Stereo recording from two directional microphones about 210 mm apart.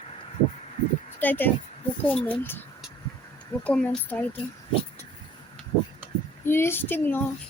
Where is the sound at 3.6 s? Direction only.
5° left (ahead or behind).